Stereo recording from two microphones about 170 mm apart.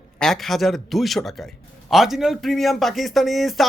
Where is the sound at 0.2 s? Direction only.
Centre (ahead or behind).